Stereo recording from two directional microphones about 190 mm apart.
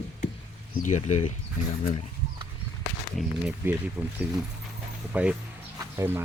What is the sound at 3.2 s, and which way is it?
Speech, 10° right (ahead or behind).